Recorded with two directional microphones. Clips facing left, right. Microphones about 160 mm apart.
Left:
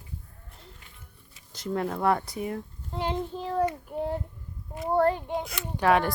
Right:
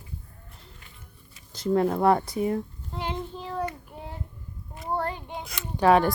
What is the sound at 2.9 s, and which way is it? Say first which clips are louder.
Speech: left 3 dB; 35° left (ahead or behind).